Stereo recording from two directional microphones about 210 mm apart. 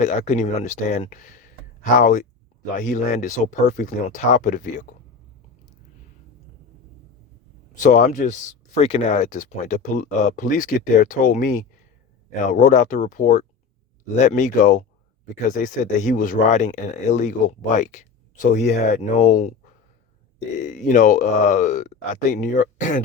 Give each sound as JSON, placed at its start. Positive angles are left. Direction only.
{"t": 0.0, "sound": "speech", "side_deg": 30}
{"t": 7.8, "sound": "speech", "side_deg": 40}